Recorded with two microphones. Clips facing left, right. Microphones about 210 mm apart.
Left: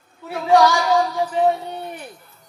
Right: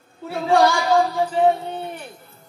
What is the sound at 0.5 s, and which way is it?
Speech, 30° right (ahead or behind).